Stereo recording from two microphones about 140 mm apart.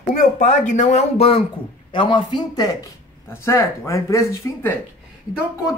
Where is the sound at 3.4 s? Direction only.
20° left (ahead or behind).